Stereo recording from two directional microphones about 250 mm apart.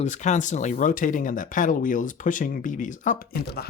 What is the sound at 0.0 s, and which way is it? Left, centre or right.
Speech, left.